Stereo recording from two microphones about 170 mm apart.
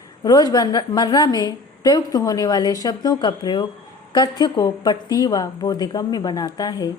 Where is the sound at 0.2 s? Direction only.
20° left (ahead or behind).